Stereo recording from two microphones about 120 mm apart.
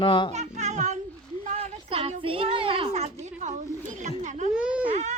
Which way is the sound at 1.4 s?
60° right (ahead or behind).